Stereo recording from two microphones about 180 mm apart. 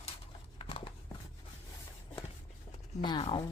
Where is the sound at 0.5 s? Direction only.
30° left (ahead or behind).